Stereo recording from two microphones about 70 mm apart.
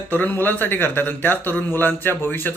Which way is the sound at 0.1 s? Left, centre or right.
Left.